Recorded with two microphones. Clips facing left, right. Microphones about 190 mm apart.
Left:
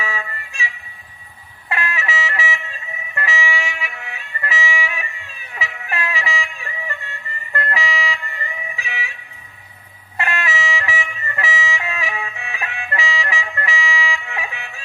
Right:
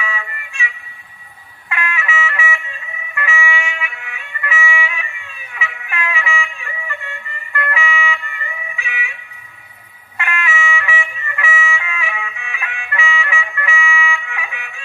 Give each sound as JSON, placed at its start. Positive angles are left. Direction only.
{"t": 0.0, "sound": "music", "side_deg": 35}
{"t": 1.7, "sound": "music", "side_deg": 35}
{"t": 10.1, "sound": "music", "side_deg": 35}